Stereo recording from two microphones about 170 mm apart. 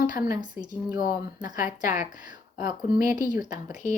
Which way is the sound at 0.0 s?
50° left (ahead or behind).